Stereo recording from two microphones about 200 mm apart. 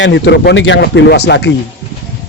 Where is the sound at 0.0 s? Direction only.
60° left (ahead or behind).